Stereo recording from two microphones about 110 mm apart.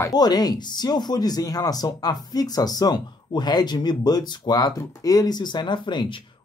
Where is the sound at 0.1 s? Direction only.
40° left (ahead or behind).